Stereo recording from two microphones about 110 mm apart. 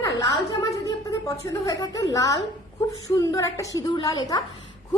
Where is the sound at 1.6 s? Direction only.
35° left (ahead or behind).